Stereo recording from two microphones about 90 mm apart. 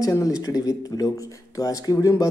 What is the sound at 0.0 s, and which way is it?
Speech, 40° left (ahead or behind).